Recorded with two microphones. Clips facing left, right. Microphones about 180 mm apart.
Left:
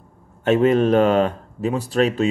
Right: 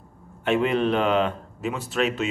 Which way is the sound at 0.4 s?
40° left (ahead or behind).